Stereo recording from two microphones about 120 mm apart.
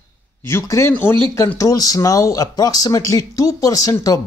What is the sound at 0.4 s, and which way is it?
Speech, 20° left (ahead or behind).